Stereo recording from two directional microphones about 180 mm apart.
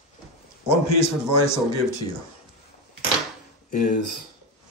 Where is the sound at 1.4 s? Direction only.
35° left (ahead or behind).